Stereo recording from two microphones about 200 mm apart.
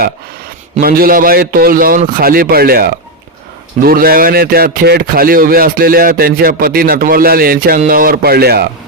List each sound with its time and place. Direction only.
0.8 s speech: 50° right (ahead or behind)